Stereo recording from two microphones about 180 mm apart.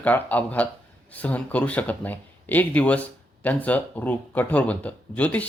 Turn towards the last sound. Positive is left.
turn(degrees=10)  # may be behind; listen again after turning